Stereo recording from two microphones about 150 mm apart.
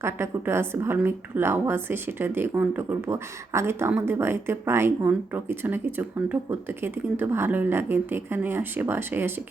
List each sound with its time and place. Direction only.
0.0 s a woman's voice: 15° right (ahead or behind)